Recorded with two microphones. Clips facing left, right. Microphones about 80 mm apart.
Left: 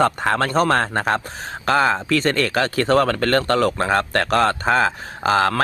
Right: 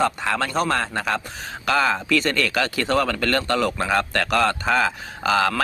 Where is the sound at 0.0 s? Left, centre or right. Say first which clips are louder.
Left 4 dB; left.